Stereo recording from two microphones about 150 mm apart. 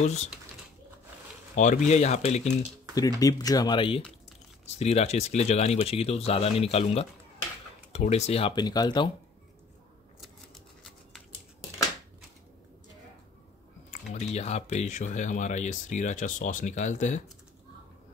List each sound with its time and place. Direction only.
0.0 s speech: 45° left (ahead or behind)
1.5 s speech: 55° left (ahead or behind)
3.2 s speech: 25° left (ahead or behind)
4.7 s speech: 45° left (ahead or behind); by 9.1 s 30° left (ahead or behind)
13.8 s speech: 50° left (ahead or behind)